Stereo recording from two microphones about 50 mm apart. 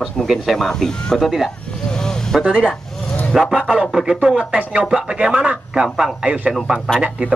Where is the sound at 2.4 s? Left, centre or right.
Centre.